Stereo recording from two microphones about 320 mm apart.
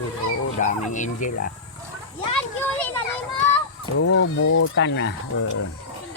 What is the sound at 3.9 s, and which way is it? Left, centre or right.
Speech, left.